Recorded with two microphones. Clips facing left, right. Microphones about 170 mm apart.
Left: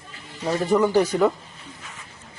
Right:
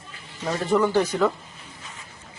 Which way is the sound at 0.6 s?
15° left (ahead or behind).